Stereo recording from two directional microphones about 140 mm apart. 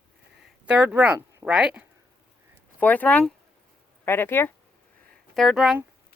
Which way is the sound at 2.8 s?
10° left (ahead or behind).